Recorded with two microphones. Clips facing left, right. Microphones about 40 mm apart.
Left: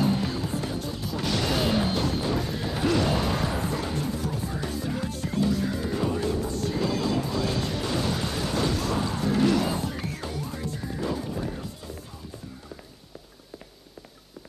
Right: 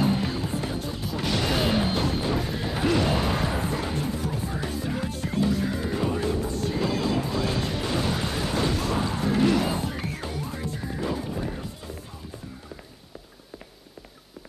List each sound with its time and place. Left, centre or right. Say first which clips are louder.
0.0 s music: right 1 dB; right